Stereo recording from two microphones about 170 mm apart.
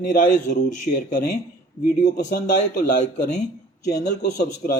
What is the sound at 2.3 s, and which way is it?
Speech, 55° left (ahead or behind).